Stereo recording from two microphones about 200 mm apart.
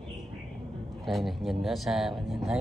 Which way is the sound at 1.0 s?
Centre (ahead or behind).